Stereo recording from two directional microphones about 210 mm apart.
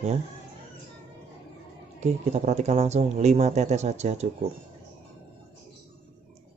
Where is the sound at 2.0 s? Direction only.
30° right (ahead or behind).